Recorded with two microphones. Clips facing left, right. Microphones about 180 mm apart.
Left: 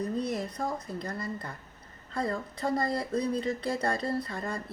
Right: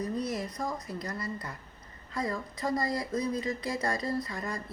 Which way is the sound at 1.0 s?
50° left (ahead or behind).